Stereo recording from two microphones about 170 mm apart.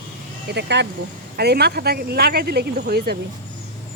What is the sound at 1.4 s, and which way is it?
Speech, 70° right (ahead or behind).